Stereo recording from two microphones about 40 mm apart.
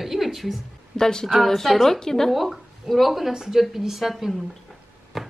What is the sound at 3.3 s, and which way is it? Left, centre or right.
Speech, centre.